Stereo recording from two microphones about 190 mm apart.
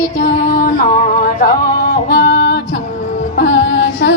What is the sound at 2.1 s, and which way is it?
Music, 55° left (ahead or behind).